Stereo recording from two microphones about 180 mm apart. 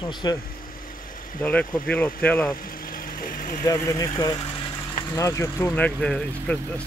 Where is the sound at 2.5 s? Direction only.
50° left (ahead or behind).